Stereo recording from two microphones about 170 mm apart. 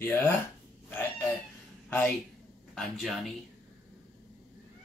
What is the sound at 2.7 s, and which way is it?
Speech, centre (ahead or behind).